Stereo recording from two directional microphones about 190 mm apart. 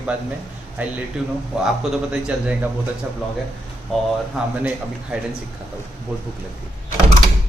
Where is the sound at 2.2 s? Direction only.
5° right (ahead or behind).